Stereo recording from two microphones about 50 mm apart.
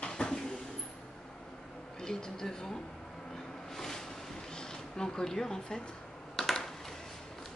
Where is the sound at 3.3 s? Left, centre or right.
Centre.